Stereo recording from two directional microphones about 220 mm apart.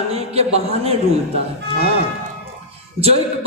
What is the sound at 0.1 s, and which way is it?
Speech, 25° right (ahead or behind).